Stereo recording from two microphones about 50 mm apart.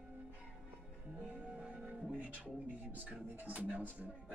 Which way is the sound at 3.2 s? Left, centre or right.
Right.